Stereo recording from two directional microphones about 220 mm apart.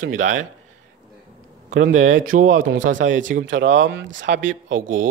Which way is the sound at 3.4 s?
55° right (ahead or behind).